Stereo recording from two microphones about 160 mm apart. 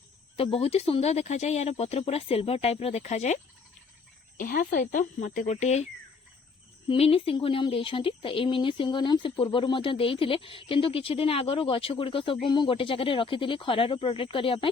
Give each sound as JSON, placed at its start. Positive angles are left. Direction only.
{"t": 0.3, "sound": "speech", "side_deg": 35}
{"t": 4.4, "sound": "speech", "side_deg": 60}